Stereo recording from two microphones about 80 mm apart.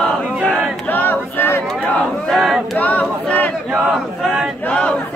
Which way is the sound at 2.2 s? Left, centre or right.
Centre.